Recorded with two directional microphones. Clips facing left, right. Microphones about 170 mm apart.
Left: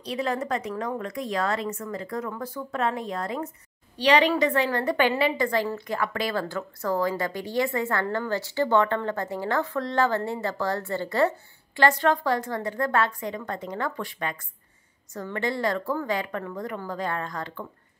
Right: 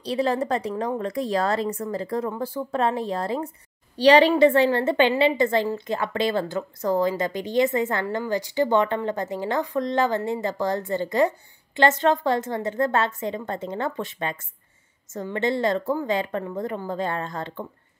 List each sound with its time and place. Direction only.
0.0 s speech: 35° right (ahead or behind)